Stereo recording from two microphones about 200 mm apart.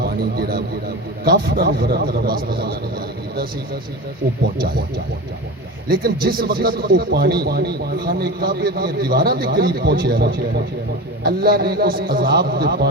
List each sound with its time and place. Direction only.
0.0 s a sound: 50° right (ahead or behind)
1.2 s a man's voice: 50° right (ahead or behind)
5.9 s a man's voice: 50° right (ahead or behind)